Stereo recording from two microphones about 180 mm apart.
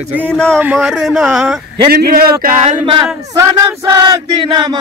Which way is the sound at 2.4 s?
45° right (ahead or behind).